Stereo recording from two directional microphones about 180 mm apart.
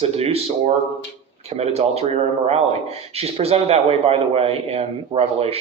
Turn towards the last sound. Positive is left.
turn(degrees=-35)  # may be behind; listen again after turning